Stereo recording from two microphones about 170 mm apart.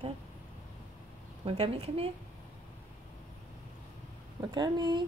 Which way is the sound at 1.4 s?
35° right (ahead or behind).